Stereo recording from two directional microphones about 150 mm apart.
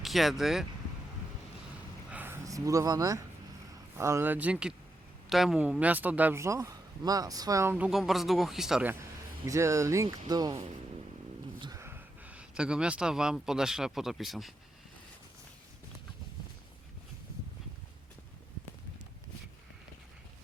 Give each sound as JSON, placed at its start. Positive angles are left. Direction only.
{"t": 0.0, "sound": "speech", "side_deg": 0}
{"t": 2.0, "sound": "a sound", "side_deg": -10}
{"t": 3.9, "sound": "speech", "side_deg": -20}
{"t": 7.9, "sound": "speech", "side_deg": 0}
{"t": 9.5, "sound": "speech", "side_deg": -20}
{"t": 11.6, "sound": "speech", "side_deg": -20}